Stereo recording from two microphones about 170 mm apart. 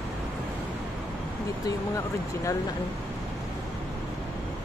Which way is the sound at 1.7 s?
20° left (ahead or behind).